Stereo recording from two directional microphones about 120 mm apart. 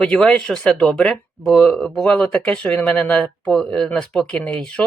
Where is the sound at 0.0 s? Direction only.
10° left (ahead or behind).